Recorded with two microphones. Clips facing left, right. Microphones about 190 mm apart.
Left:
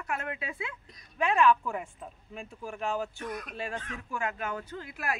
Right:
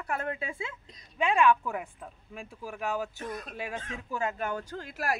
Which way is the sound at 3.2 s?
30° right (ahead or behind).